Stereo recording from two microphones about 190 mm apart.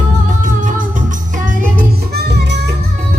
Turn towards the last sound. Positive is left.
turn(degrees=-65)  # may be behind; listen again after turning